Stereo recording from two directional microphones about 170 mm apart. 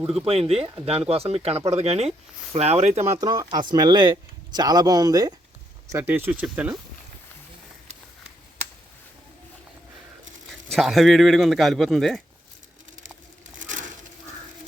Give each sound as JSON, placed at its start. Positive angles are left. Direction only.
{"t": 0.3, "sound": "speech", "side_deg": -35}
{"t": 3.1, "sound": "speech", "side_deg": -25}
{"t": 10.7, "sound": "speech", "side_deg": 0}
{"t": 13.6, "sound": "a sound", "side_deg": -50}